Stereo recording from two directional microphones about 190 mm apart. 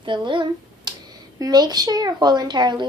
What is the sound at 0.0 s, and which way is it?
Speech, 25° right (ahead or behind).